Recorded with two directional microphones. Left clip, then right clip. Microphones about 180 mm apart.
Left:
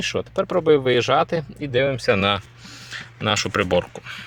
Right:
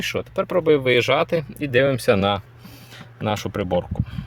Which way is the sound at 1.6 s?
25° right (ahead or behind).